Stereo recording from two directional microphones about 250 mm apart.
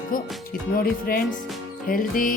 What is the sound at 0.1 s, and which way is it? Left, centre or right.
Music, left.